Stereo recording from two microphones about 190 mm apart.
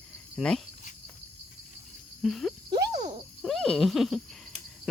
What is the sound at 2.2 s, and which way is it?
Frog, centre (ahead or behind).